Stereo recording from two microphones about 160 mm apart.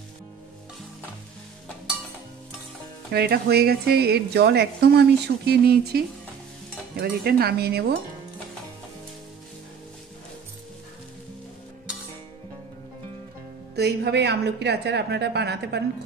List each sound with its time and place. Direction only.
3.1 s a woman's voice: 80° right
7.0 s a sound: 75° right (ahead or behind)
13.7 s a woman's voice: 90° right